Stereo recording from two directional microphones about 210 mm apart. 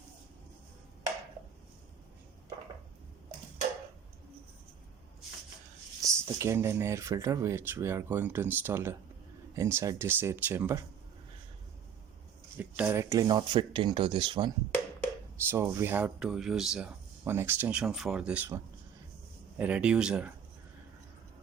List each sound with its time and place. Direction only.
6.0 s speech: 15° right (ahead or behind)
12.5 s speech: 10° right (ahead or behind)
15.4 s speech: 10° right (ahead or behind)